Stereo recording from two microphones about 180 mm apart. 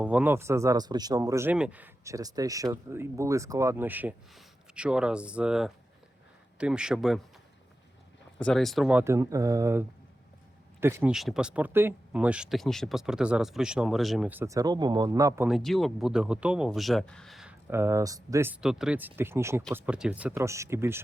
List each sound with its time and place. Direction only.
0.0 s speech: 10° right (ahead or behind)
8.4 s speech: 5° left (ahead or behind); by 11.1 s 15° right (ahead or behind)
11.1 s speech: centre (ahead or behind); by 15.4 s 20° right (ahead or behind)
15.4 s speech: centre (ahead or behind)
17.7 s speech: 15° right (ahead or behind)
18.6 s speech: 5° right (ahead or behind)